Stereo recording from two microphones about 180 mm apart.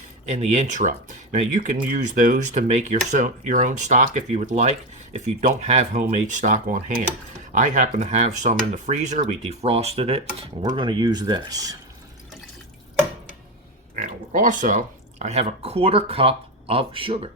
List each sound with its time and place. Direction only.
0.3 s speech: 40° right (ahead or behind); by 11.8 s 20° right (ahead or behind)
13.9 s speech: 45° right (ahead or behind); by 17.2 s 30° right (ahead or behind)